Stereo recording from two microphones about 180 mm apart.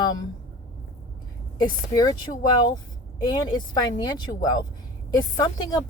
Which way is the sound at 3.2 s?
25° left (ahead or behind).